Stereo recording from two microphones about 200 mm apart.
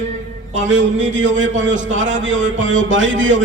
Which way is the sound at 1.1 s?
35° right (ahead or behind).